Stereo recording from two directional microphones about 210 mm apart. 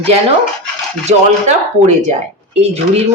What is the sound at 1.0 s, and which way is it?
Speech, 35° right (ahead or behind).